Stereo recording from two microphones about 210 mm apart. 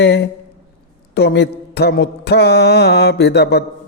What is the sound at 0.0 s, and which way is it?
Mantra, 55° left (ahead or behind).